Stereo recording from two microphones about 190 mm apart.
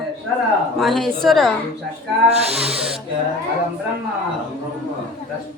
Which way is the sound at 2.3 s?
35° right (ahead or behind).